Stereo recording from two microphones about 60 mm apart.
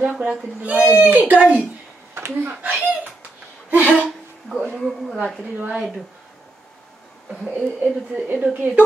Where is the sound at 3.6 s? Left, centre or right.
Right.